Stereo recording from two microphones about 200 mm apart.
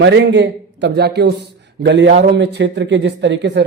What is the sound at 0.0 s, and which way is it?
Speech, 65° right (ahead or behind).